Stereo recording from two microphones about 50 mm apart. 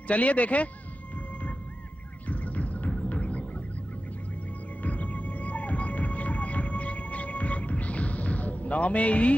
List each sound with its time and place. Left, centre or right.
0.1 s speech: left
2.2 s music: left
4.8 s whale vocalization: left